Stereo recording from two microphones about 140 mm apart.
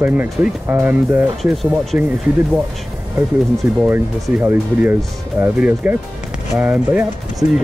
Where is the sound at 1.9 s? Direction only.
10° right (ahead or behind).